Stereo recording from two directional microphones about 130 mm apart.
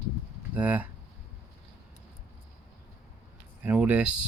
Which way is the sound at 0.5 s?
10° right (ahead or behind).